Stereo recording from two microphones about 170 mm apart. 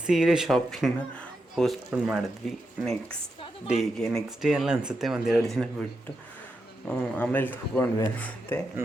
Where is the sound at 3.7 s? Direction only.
Centre (ahead or behind).